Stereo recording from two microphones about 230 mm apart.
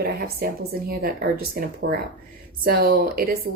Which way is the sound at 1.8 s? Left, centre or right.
Right.